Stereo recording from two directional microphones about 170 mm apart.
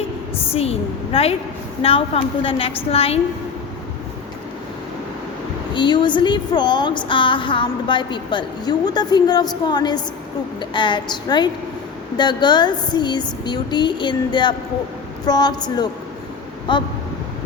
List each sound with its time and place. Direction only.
0.5 s a woman's voice: 35° left (ahead or behind)
5.7 s a woman's voice: 25° left (ahead or behind)